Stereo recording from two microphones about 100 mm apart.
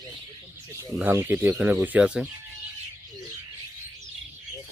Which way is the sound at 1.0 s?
20° right (ahead or behind).